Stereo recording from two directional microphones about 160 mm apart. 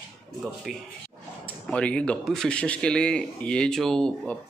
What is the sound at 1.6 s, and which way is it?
Speech, 5° left (ahead or behind).